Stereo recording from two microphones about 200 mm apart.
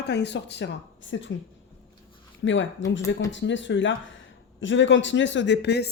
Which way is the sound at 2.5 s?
65° left (ahead or behind).